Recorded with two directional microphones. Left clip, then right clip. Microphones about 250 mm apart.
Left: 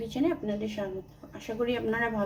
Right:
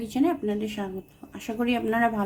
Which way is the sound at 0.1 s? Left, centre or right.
Right.